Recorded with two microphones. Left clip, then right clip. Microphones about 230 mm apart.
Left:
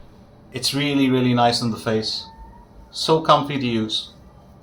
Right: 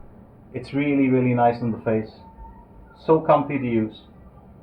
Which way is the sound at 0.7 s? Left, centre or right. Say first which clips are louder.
Even; left.